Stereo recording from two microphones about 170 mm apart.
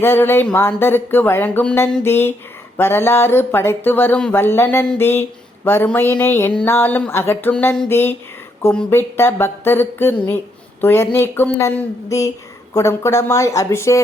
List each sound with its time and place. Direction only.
0.0 s speech: 15° left (ahead or behind)